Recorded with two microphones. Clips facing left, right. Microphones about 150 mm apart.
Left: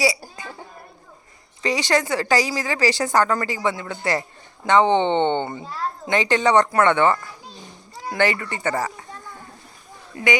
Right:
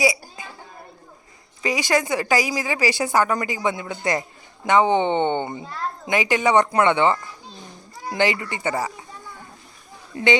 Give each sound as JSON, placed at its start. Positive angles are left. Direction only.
{"t": 1.6, "sound": "a woman's voice", "side_deg": -10}
{"t": 10.1, "sound": "speech", "side_deg": -30}